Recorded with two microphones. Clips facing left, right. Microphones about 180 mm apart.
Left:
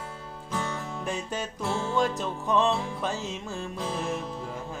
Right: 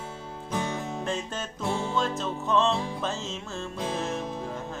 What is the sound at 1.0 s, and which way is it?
Music, 10° left (ahead or behind).